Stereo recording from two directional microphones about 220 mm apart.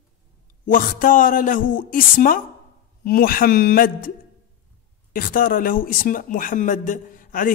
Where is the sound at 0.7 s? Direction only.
40° left (ahead or behind).